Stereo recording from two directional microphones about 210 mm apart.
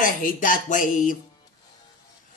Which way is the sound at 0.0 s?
40° left (ahead or behind).